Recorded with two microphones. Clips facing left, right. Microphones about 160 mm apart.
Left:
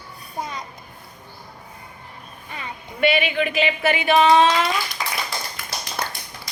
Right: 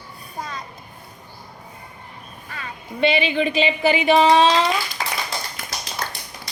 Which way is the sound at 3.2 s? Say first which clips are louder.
Right 2 dB; 30° right (ahead or behind).